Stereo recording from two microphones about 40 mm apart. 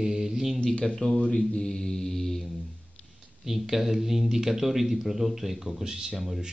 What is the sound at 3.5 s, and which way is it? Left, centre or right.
Speech, centre.